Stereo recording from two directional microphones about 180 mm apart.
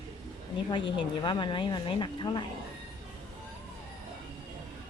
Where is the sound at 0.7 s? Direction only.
25° left (ahead or behind).